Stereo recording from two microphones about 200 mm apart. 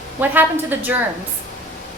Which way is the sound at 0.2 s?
10° right (ahead or behind).